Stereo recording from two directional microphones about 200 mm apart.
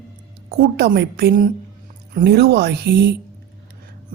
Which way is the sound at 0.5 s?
50° right (ahead or behind).